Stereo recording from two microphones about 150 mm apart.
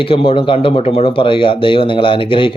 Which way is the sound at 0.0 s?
35° left (ahead or behind).